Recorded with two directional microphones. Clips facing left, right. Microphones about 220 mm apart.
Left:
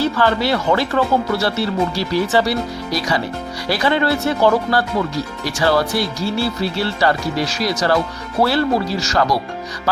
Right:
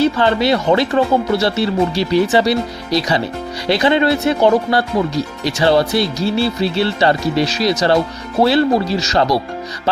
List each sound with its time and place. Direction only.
0.0 s speech: 20° right (ahead or behind)